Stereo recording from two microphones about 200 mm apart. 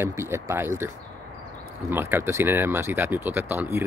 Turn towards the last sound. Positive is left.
turn(degrees=-10)  # may be behind; listen again after turning